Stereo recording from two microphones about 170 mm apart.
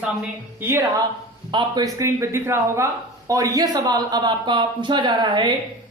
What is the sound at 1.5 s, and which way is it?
A man's voice, 25° right (ahead or behind).